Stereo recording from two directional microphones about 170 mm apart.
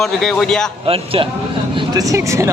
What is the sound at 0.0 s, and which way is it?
Speech, centre (ahead or behind).